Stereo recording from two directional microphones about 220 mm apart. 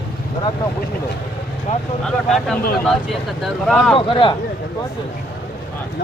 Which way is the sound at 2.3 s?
Centre (ahead or behind).